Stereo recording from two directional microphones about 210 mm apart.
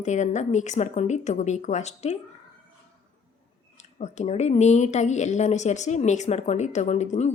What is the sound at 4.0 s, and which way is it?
Speech, 30° left (ahead or behind).